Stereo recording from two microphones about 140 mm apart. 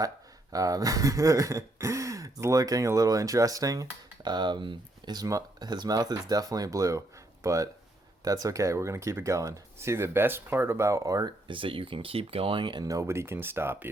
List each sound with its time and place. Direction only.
0.5 s speech: 25° right (ahead or behind)
11.5 s speech: 40° right (ahead or behind); by 13.9 s 15° right (ahead or behind)